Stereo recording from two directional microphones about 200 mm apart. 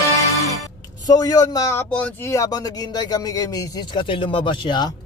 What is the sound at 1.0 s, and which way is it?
A man's voice, 20° left (ahead or behind).